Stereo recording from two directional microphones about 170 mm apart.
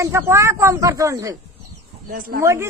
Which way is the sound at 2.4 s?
15° right (ahead or behind).